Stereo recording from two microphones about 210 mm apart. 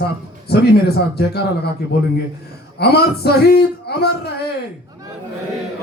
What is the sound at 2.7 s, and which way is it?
A man's voice, 50° left (ahead or behind).